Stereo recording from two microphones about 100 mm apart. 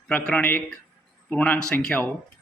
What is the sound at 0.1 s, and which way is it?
Speech, 10° left (ahead or behind).